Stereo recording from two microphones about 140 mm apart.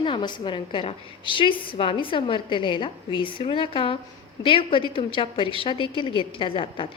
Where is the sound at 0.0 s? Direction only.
35° left (ahead or behind).